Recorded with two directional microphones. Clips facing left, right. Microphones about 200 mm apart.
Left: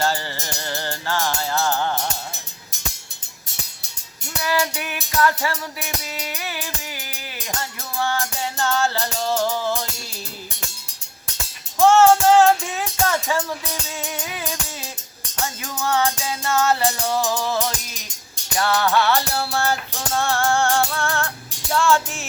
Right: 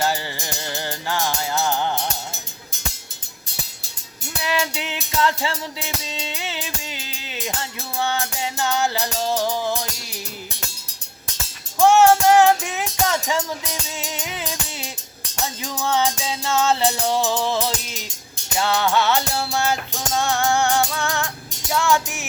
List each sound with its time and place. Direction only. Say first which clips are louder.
0.0 s music: even; 15° right (ahead or behind)
4.4 s music: left 1 dB; 25° right (ahead or behind)
11.8 s music: even; 15° right (ahead or behind)